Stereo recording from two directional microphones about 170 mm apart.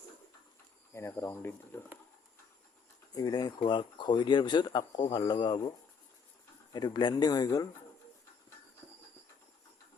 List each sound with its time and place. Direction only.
0.9 s speech: 15° left (ahead or behind)
3.2 s speech: 25° left (ahead or behind)
6.7 s speech: 25° left (ahead or behind)